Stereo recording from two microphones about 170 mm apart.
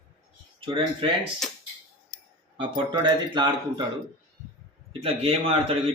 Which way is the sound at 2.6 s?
30° right (ahead or behind).